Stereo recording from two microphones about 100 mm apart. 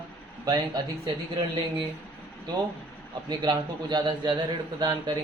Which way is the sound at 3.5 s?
45° right (ahead or behind).